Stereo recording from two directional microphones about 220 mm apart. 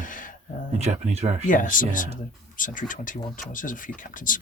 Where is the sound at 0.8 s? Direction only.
30° right (ahead or behind).